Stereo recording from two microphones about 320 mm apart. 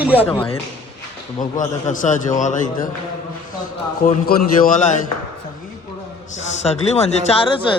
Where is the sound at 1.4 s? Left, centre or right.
Left.